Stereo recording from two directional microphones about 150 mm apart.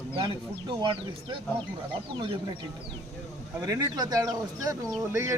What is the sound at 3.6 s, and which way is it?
Speech, 25° right (ahead or behind).